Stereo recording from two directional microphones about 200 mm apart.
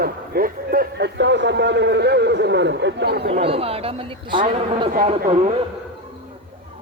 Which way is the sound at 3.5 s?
30° right (ahead or behind).